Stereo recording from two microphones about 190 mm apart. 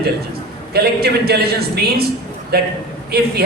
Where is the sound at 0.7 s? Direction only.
55° right (ahead or behind).